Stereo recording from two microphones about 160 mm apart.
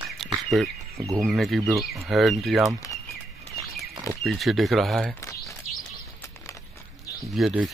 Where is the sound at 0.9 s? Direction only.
20° right (ahead or behind).